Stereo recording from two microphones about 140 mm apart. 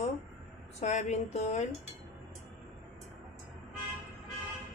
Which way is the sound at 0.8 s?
55° left (ahead or behind).